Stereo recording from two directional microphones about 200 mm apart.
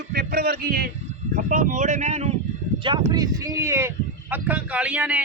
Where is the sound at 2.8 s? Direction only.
20° right (ahead or behind).